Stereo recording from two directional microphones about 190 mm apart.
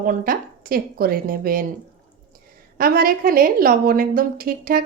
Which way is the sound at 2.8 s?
50° right (ahead or behind).